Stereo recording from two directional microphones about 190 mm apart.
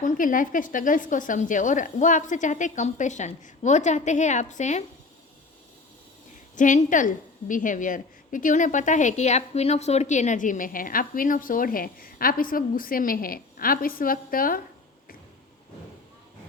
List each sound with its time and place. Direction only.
0.0 s speech: 45° left (ahead or behind)
6.6 s a woman's voice: 40° left (ahead or behind)